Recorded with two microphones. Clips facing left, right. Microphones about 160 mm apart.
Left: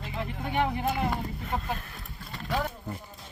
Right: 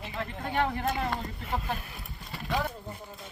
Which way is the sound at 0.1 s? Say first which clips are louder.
Left 1 dB; 15° left (ahead or behind).